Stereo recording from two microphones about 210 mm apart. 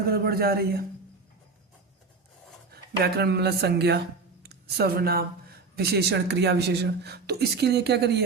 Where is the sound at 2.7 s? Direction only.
50° right (ahead or behind).